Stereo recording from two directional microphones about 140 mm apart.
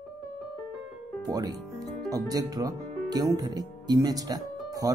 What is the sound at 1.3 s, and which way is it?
Speech, 25° right (ahead or behind).